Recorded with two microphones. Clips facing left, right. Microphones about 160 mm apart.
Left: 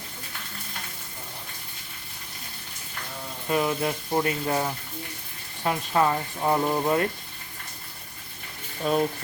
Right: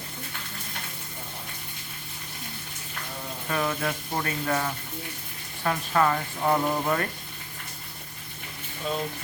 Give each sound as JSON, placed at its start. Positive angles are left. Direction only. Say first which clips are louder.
{"t": 3.5, "sound": "speech", "louder": "left 3 dB", "side_deg": 20}
{"t": 8.8, "sound": "speech", "louder": "left 6 dB", "side_deg": 55}